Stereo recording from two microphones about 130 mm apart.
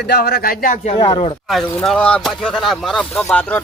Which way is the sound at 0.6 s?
75° left (ahead or behind).